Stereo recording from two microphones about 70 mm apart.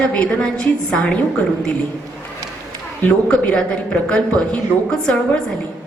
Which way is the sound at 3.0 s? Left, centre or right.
Left.